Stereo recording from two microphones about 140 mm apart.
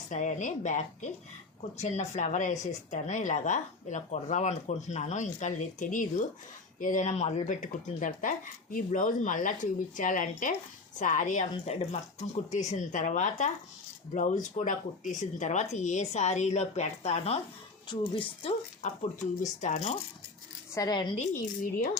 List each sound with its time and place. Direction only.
0.1 s speech: 60° left (ahead or behind)
11.6 s speech: 50° left (ahead or behind)
17.8 s speech: 35° left (ahead or behind)
18.8 s speech: 55° left (ahead or behind)
20.7 s speech: 30° left (ahead or behind)
21.2 s speech: 70° left (ahead or behind)